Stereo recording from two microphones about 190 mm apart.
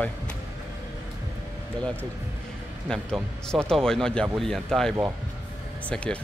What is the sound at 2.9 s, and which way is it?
A man's voice, 5° left (ahead or behind).